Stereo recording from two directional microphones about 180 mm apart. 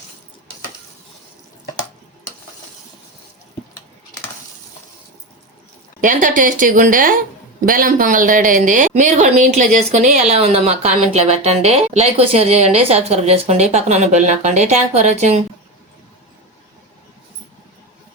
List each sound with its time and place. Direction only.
6.0 s a woman's voice: 45° right (ahead or behind)